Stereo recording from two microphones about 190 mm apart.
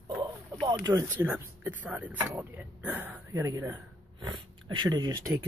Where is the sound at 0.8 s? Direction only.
10° right (ahead or behind).